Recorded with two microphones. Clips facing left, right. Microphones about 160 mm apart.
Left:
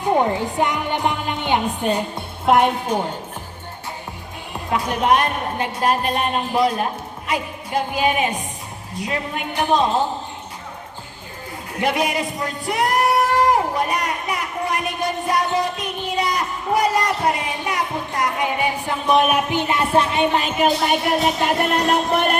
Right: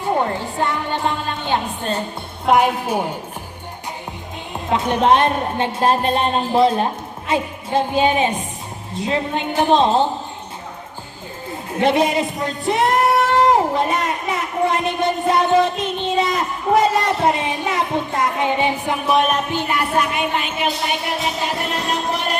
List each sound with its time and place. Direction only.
0.0 s a woman's voice: 15° left (ahead or behind)
2.5 s a woman's voice: centre (ahead or behind)
4.5 s a woman's voice: 25° right (ahead or behind)
11.8 s music: 25° right (ahead or behind)
19.0 s a woman's voice: centre (ahead or behind)
19.5 s speech: 20° left (ahead or behind); by 21.0 s 40° left (ahead or behind)
22.1 s music: 55° left (ahead or behind)